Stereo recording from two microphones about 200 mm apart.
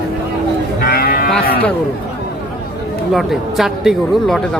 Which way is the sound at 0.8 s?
50° left (ahead or behind).